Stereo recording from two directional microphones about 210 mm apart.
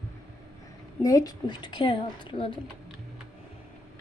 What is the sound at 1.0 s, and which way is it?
Speech, 15° left (ahead or behind).